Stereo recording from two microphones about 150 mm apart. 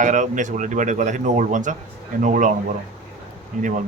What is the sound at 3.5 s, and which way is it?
Speech, 60° right (ahead or behind).